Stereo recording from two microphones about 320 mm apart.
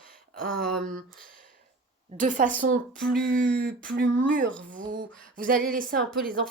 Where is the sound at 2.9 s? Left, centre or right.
Centre.